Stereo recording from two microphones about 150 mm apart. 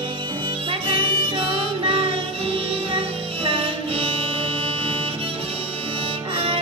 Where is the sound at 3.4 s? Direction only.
40° right (ahead or behind).